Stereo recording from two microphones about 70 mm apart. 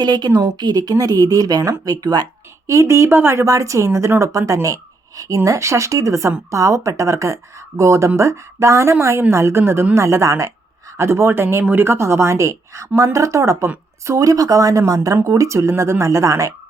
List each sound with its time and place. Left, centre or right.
0.0 s speech: right
2.6 s speech: right
3.4 s speech: right
5.5 s speech: right